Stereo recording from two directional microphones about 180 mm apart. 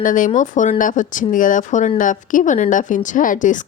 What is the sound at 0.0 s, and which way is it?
A woman's voice, 50° left (ahead or behind).